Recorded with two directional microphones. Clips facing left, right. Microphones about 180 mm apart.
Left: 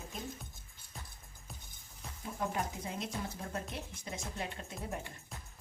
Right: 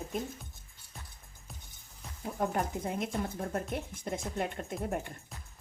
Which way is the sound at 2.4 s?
55° right (ahead or behind).